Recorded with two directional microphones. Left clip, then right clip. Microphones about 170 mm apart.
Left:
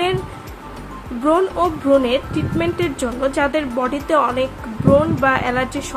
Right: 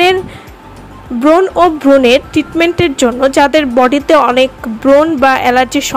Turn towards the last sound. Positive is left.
turn(degrees=-50)  # may be behind; listen again after turning